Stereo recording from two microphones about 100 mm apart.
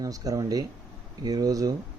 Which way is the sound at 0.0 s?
35° right (ahead or behind).